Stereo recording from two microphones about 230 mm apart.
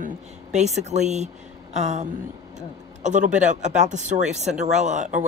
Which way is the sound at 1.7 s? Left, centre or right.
Right.